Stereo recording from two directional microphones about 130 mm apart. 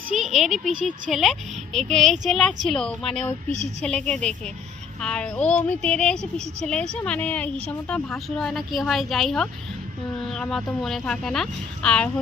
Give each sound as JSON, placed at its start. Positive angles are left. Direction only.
{"t": 0.2, "sound": "a woman's voice", "side_deg": 0}
{"t": 3.5, "sound": "a woman's voice", "side_deg": -60}
{"t": 3.8, "sound": "a woman's voice", "side_deg": 5}